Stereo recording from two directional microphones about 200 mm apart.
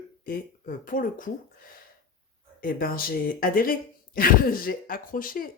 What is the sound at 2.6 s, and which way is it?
Speech, 45° left (ahead or behind).